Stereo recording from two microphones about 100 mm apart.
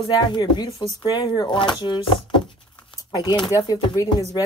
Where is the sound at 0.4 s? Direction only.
45° left (ahead or behind).